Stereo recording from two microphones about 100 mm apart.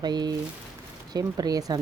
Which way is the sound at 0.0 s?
45° right (ahead or behind).